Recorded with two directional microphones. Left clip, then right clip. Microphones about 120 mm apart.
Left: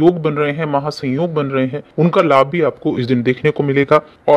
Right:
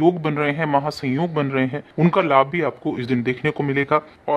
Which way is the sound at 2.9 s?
35° left (ahead or behind).